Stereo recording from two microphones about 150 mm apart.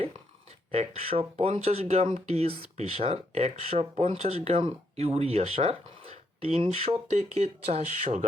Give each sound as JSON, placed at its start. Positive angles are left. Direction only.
{"t": 0.7, "sound": "speech", "side_deg": -45}